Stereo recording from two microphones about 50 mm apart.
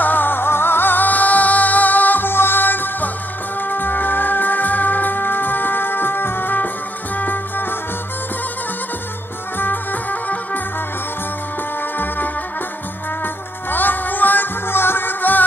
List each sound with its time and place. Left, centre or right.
0.0 s music: left
9.6 s music: left
13.2 s music: left